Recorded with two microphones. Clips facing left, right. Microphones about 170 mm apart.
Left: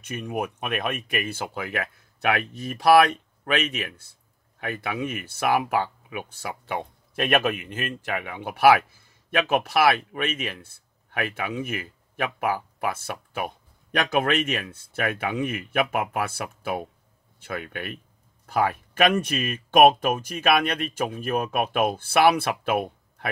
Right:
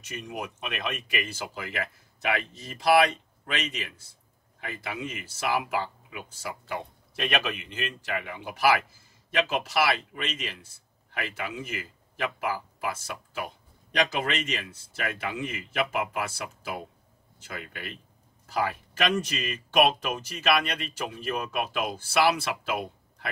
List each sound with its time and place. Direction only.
0.0 s speech: 55° left (ahead or behind)